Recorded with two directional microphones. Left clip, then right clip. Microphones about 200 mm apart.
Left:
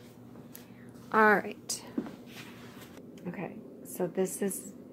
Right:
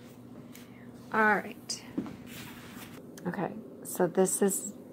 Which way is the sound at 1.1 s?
35° left (ahead or behind).